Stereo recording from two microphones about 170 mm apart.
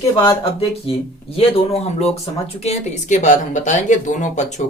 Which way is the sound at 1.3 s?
35° left (ahead or behind).